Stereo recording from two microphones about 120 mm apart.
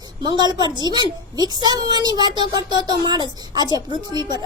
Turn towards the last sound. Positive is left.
turn(degrees=-35)  # may be behind; listen again after turning